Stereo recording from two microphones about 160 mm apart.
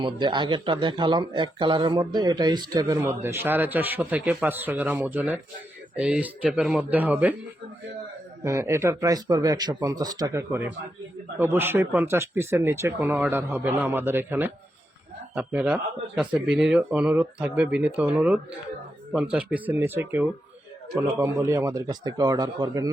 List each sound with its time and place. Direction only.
0.0 s speech: 30° right (ahead or behind); by 7.3 s 10° right (ahead or behind)
8.4 s speech: 15° right (ahead or behind)